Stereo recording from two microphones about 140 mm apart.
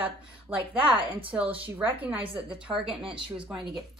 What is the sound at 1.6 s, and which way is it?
A woman's voice, 10° right (ahead or behind).